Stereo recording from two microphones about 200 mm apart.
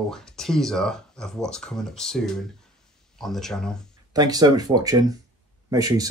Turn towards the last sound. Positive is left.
turn(degrees=-20)  # may be behind; listen again after turning